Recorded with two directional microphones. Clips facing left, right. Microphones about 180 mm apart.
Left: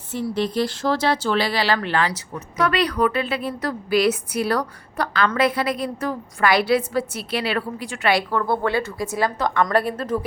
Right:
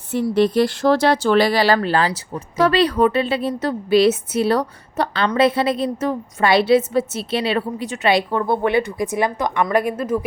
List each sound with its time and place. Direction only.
0.1 s speech: 60° right (ahead or behind); by 10.2 s 10° right (ahead or behind)